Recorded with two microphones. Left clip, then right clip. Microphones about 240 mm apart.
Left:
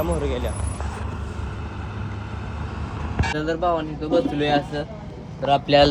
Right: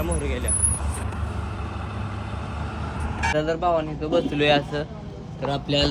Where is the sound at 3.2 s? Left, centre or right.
Centre.